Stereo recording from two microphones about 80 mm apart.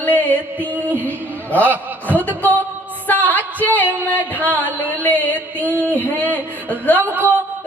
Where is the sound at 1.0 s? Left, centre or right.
Centre.